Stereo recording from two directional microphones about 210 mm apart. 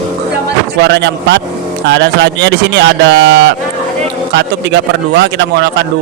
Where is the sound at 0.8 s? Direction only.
55° right (ahead or behind).